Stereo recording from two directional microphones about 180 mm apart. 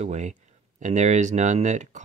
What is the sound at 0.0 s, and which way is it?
Speech, 40° right (ahead or behind).